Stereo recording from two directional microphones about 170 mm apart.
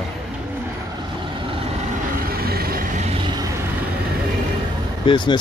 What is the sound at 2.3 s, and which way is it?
Vehicle, 65° right (ahead or behind).